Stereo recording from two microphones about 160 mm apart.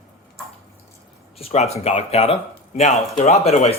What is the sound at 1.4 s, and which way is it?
Speech, 40° left (ahead or behind).